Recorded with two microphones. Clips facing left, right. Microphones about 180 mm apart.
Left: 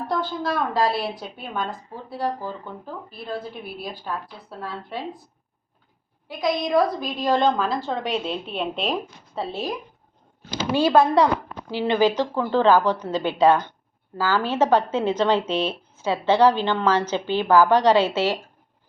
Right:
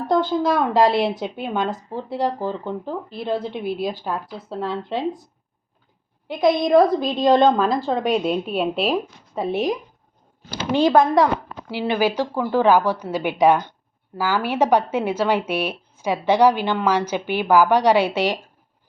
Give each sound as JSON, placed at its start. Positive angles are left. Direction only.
{"t": 0.1, "sound": "speech", "side_deg": -20}